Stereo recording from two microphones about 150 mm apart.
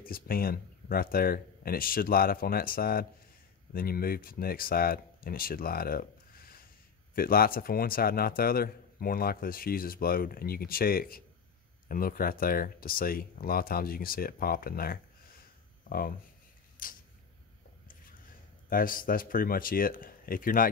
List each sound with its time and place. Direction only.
0.0 s a man's voice: 75° left (ahead or behind)
16.8 s camera: 70° left (ahead or behind)
18.7 s a man's voice: 70° left (ahead or behind)